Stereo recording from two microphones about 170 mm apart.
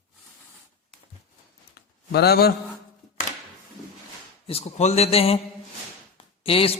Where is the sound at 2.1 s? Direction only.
70° left (ahead or behind).